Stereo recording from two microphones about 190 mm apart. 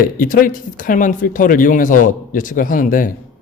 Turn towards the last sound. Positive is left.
turn(degrees=45)  # may be behind; listen again after turning